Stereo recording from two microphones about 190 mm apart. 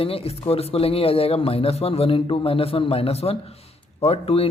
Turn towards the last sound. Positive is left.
turn(degrees=30)  # may be behind; listen again after turning